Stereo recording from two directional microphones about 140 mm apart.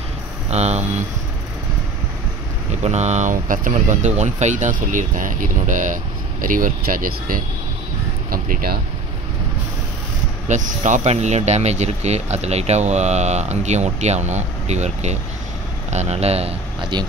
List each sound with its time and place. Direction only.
0.5 s speech: 50° right (ahead or behind)
2.7 s speech: 55° right (ahead or behind)
6.4 s speech: 75° right (ahead or behind)
8.3 s vehicle: 90° right
10.5 s speech: 60° right (ahead or behind)
16.9 s speech: 30° right (ahead or behind)